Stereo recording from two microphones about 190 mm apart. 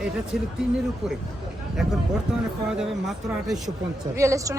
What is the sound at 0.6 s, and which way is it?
Speech, 5° right (ahead or behind).